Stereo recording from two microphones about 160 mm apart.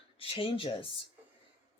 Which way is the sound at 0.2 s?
35° left (ahead or behind).